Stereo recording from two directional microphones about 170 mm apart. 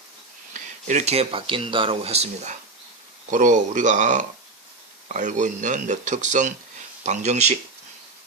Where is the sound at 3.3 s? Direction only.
50° right (ahead or behind).